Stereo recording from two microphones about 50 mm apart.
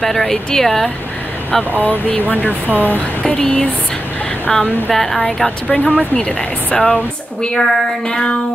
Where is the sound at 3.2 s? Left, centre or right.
Centre.